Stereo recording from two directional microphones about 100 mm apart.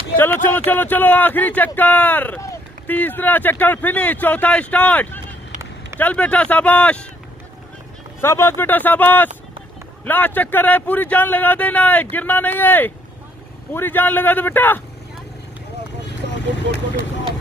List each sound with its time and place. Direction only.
0.2 s speech: 20° left (ahead or behind)
8.2 s speech: 25° left (ahead or behind)